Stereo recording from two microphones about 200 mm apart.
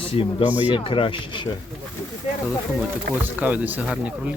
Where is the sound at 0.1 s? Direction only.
25° left (ahead or behind).